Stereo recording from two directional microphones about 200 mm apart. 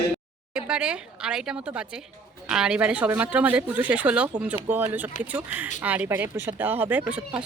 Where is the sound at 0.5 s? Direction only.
5° right (ahead or behind).